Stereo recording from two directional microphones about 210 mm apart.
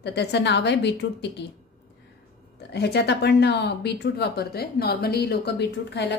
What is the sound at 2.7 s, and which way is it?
A woman's voice, 50° left (ahead or behind).